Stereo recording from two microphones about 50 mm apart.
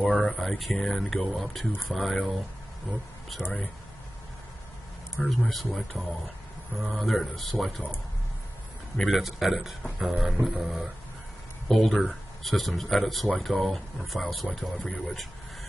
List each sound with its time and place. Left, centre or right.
0.0 s a sound: left
0.3 s speech: centre
5.2 s speech: centre
8.9 s speech: centre
9.9 s music: centre
11.9 s speech: centre
12.4 s speech: centre
14.6 s speech: left